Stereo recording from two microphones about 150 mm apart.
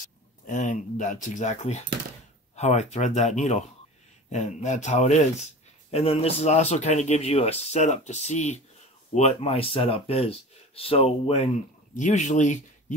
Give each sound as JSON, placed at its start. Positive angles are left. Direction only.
{"t": 0.0, "sound": "speech", "side_deg": 60}